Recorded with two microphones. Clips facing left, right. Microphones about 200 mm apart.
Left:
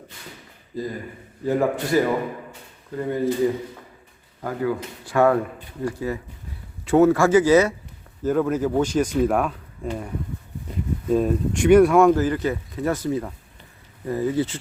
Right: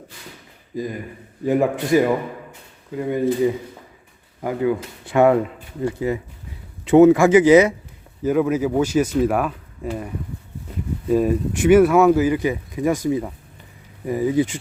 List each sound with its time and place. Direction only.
0.7 s speech: 15° right (ahead or behind)
4.4 s speech: 20° right (ahead or behind); by 10.1 s 5° right (ahead or behind)
11.1 s speech: 5° right (ahead or behind)